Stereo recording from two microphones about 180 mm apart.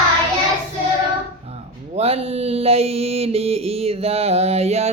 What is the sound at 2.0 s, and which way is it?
Mantra, 35° right (ahead or behind).